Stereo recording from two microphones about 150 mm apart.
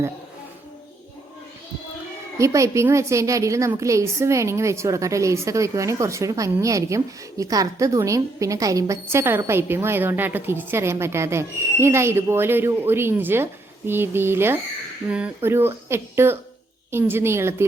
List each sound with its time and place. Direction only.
2.4 s a woman's voice: 20° right (ahead or behind)